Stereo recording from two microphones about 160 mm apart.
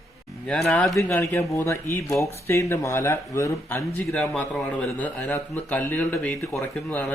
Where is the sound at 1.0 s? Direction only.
15° left (ahead or behind).